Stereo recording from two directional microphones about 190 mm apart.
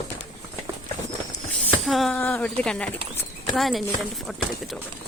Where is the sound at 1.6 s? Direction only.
Centre (ahead or behind).